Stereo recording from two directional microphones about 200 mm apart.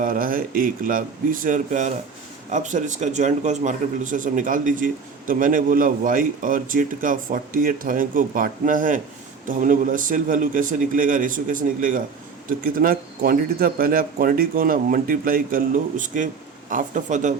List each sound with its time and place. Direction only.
0.0 s speech: 45° right (ahead or behind)